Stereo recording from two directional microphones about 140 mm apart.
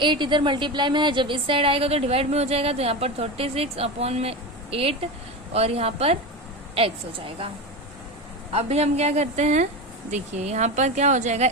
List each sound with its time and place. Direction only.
0.0 s a woman's voice: 35° right (ahead or behind)
8.5 s a woman's voice: 50° right (ahead or behind)